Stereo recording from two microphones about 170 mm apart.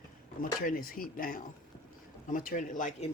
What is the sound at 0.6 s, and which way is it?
Speech, 55° left (ahead or behind).